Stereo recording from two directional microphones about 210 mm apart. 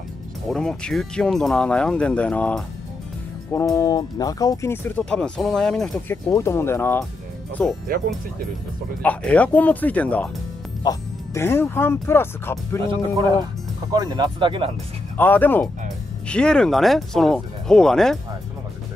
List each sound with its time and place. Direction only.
0.5 s speech: 5° left (ahead or behind)
6.3 s speech: 10° left (ahead or behind)
9.0 s speech: 5° left (ahead or behind)
13.9 s speech: 20° right (ahead or behind)
15.1 s speech: 10° left (ahead or behind)